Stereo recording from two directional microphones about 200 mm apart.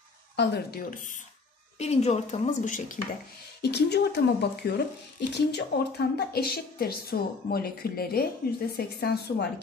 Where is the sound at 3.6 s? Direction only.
55° left (ahead or behind).